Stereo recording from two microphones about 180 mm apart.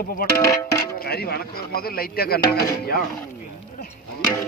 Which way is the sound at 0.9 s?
60° left (ahead or behind).